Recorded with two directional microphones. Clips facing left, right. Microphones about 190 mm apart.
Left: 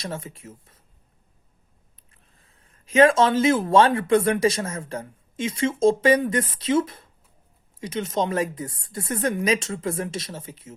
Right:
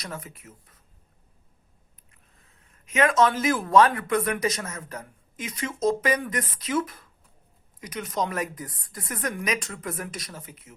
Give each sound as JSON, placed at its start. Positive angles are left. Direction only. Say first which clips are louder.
{"t": 0.0, "sound": "speech", "louder": "left 5 dB", "side_deg": 25}
{"t": 2.3, "sound": "speech", "louder": "left 1 dB", "side_deg": 30}